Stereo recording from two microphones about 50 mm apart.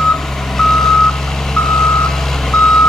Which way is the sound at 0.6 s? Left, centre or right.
Centre.